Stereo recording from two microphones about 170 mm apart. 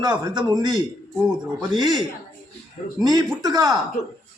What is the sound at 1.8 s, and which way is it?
A man's voice, 25° right (ahead or behind).